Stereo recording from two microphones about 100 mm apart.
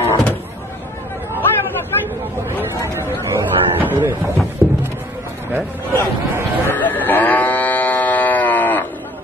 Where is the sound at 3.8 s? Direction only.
20° right (ahead or behind).